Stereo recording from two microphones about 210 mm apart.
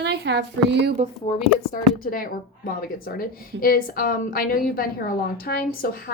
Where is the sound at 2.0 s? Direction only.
40° left (ahead or behind).